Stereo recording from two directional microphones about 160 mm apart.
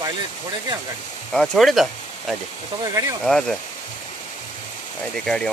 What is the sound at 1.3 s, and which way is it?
Speech, centre (ahead or behind).